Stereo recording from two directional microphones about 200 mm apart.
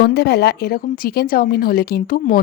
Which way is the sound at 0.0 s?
55° left (ahead or behind).